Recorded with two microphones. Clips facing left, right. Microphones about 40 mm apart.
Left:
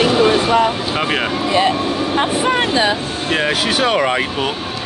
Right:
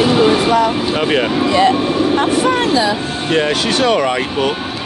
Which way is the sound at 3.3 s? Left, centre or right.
Centre.